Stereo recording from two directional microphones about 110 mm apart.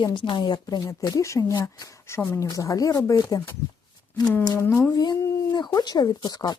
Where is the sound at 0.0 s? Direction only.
45° left (ahead or behind).